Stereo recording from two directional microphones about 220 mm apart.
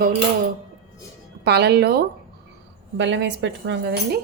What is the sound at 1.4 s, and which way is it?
Speech, 50° right (ahead or behind).